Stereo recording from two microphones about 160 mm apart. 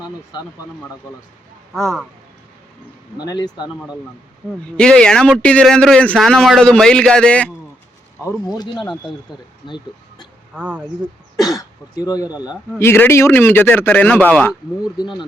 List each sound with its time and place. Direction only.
1.7 s a man's voice: centre (ahead or behind)
3.2 s speech: 25° left (ahead or behind)
4.6 s a man's voice: 5° left (ahead or behind)
9.1 s speech: 30° left (ahead or behind)
10.5 s speech: 5° right (ahead or behind)
11.9 s a man's voice: 20° left (ahead or behind)